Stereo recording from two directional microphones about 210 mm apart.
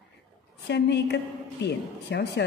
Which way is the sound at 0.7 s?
55° left (ahead or behind).